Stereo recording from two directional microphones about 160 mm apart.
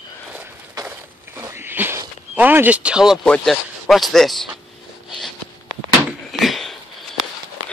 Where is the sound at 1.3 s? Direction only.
15° right (ahead or behind).